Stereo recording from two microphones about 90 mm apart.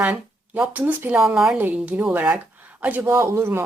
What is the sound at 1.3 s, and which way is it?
Speech, 5° right (ahead or behind).